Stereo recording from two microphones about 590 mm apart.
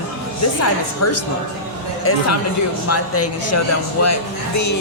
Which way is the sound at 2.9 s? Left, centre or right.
Left.